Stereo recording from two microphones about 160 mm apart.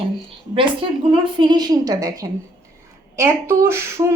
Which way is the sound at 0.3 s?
35° right (ahead or behind).